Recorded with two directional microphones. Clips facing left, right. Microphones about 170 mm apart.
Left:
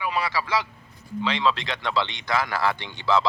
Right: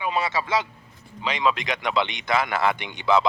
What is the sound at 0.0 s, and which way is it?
A man's voice, 25° right (ahead or behind).